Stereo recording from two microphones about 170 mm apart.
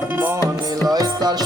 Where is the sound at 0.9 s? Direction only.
25° right (ahead or behind).